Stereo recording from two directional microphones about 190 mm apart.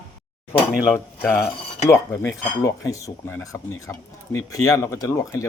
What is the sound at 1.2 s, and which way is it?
Speech, 10° left (ahead or behind).